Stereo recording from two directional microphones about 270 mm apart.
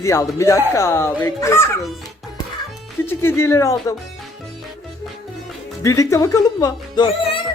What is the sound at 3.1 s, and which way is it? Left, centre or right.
Speech, centre.